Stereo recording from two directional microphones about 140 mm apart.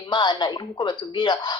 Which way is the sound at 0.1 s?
35° left (ahead or behind).